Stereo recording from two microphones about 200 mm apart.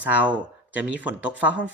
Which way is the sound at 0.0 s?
10° right (ahead or behind).